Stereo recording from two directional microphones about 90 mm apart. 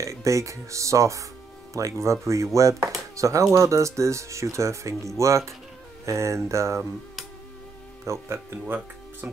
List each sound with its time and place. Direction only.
0.0 s speech: 35° right (ahead or behind)
8.0 s speech: 30° right (ahead or behind)